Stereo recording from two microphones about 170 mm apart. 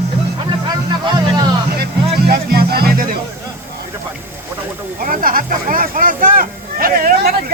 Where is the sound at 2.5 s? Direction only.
65° right (ahead or behind).